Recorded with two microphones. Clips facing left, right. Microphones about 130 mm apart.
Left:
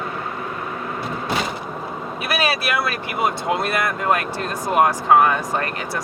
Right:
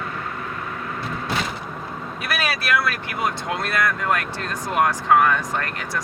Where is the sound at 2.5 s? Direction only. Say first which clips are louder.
Left 1 dB; 25° left (ahead or behind).